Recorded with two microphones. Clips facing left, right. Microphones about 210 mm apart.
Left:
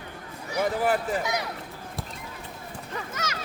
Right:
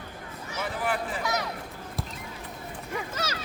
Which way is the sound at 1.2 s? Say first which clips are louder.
Left 1 dB; 20° left (ahead or behind).